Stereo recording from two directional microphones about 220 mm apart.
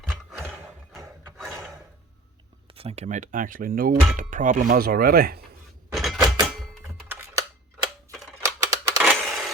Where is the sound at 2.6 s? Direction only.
25° right (ahead or behind); by 5.4 s 45° right (ahead or behind).